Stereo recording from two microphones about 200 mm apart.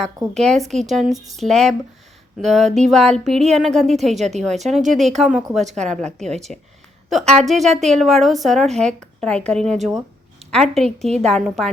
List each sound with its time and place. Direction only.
0.3 s a woman's voice: centre (ahead or behind)
1.1 s speech: 15° right (ahead or behind)
1.4 s a woman's voice: centre (ahead or behind)